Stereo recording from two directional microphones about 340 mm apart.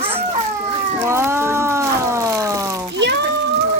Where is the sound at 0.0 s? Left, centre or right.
Centre.